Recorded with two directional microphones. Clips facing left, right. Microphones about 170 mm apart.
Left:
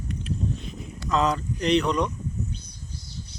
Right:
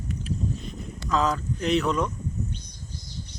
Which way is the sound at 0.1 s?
Centre (ahead or behind).